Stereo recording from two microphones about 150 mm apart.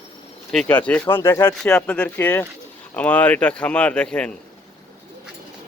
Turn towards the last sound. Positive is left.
turn(degrees=5)  # may be behind; listen again after turning